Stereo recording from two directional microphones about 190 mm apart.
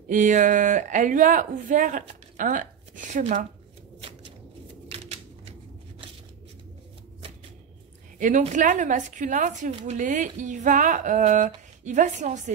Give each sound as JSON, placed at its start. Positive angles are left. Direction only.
{"t": 0.1, "sound": "speech", "side_deg": -40}
{"t": 4.8, "sound": "typewriter", "side_deg": -35}
{"t": 8.2, "sound": "speech", "side_deg": -40}